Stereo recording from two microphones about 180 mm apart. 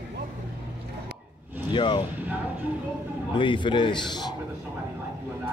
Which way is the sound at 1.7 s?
25° left (ahead or behind).